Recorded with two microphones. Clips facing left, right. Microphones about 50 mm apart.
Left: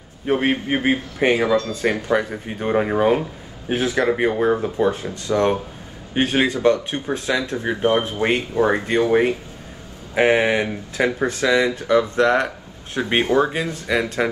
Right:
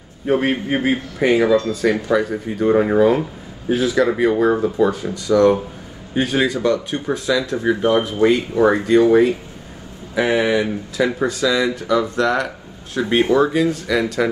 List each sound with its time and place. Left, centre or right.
0.3 s speech: left